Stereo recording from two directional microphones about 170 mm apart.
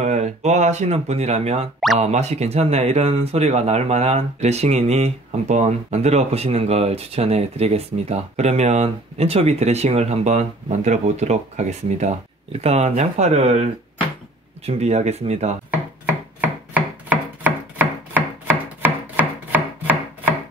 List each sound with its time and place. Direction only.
0.0 s speech: 40° right (ahead or behind)
14.7 s speech: 40° right (ahead or behind)
17.1 s chopping: 10° right (ahead or behind)